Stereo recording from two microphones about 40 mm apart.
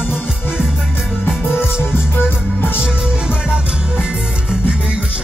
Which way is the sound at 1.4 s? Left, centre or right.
Left.